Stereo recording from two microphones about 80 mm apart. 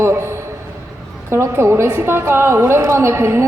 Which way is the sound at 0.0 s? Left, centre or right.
Right.